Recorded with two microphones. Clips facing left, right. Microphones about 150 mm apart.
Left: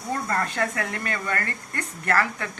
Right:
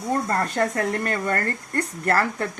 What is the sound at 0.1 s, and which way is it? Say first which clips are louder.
Speech: right 3 dB; 40° right (ahead or behind).